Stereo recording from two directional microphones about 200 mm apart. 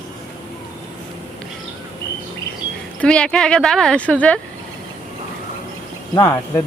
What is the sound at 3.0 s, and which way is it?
Speech, 5° left (ahead or behind).